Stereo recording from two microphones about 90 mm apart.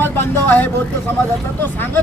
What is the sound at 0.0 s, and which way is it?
Speech, 25° left (ahead or behind).